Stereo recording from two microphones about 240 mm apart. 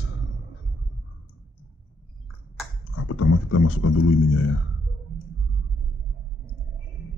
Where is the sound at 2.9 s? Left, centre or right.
Left.